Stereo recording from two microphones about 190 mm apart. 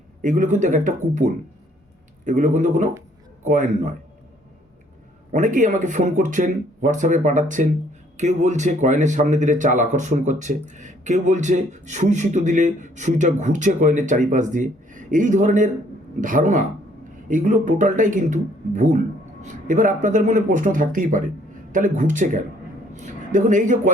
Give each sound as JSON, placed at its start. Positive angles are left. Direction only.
{"t": 0.2, "sound": "a man's voice", "side_deg": -40}
{"t": 5.3, "sound": "a man's voice", "side_deg": -40}